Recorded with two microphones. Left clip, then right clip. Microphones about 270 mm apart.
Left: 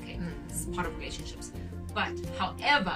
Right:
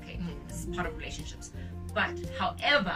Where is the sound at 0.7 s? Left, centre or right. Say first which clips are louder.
Even; centre.